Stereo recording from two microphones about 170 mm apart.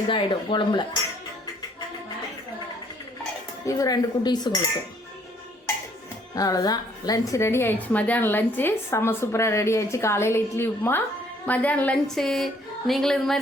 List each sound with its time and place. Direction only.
0.1 s speech: 30° left (ahead or behind)
3.7 s speech: 20° left (ahead or behind)
6.3 s a woman's voice: 20° left (ahead or behind); by 13.4 s centre (ahead or behind)